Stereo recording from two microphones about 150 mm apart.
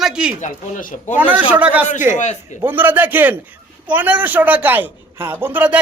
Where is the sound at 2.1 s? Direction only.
50° left (ahead or behind).